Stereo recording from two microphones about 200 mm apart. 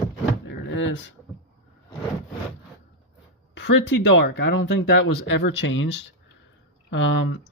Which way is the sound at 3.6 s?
60° left (ahead or behind).